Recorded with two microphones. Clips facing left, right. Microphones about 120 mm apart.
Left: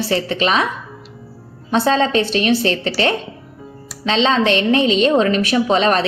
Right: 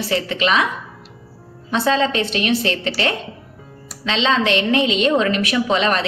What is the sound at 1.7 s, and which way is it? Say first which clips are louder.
A woman's voice: left 2 dB; 35° left (ahead or behind).